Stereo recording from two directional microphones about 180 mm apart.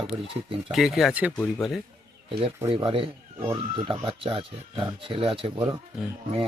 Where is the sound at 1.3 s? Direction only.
5° left (ahead or behind).